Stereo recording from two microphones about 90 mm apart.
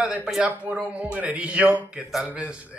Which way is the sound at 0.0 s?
5° right (ahead or behind).